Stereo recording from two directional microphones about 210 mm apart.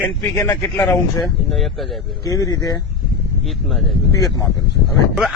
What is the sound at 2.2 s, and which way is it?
Speech, 15° left (ahead or behind).